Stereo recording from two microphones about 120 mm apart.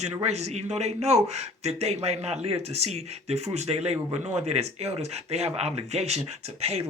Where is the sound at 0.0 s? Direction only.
60° right (ahead or behind).